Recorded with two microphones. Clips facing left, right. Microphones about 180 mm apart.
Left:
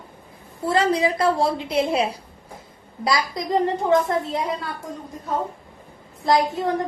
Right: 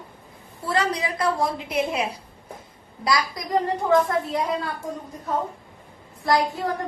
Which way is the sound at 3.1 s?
25° left (ahead or behind).